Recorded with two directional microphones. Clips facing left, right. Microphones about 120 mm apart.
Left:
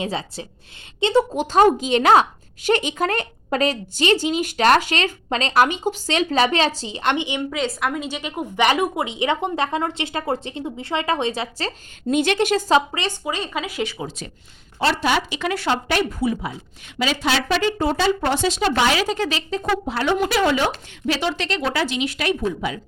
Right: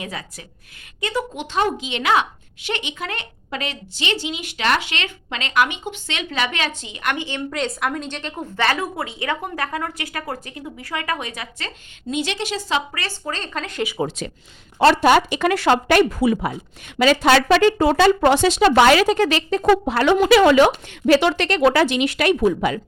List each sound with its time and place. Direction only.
0.0 s a woman's voice: 30° left (ahead or behind)
7.5 s a woman's voice: centre (ahead or behind); by 11.7 s 30° left (ahead or behind)
12.0 s a woman's voice: 50° left (ahead or behind)
12.9 s speech: 20° left (ahead or behind)
14.8 s speech: 55° right (ahead or behind)
15.5 s a woman's voice: 75° right (ahead or behind); by 16.5 s 90° right
17.0 s a woman's voice: 55° right (ahead or behind)